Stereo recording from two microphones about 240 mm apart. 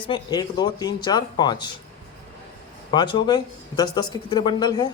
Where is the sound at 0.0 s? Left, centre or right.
Centre.